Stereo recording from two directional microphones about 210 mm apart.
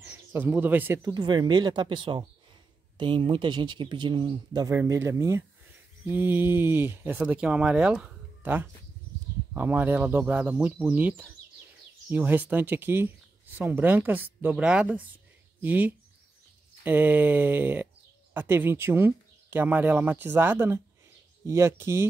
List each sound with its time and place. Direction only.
0.0 s speech: 10° right (ahead or behind)